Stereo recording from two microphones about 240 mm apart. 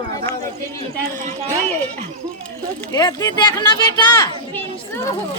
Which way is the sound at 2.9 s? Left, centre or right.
Centre.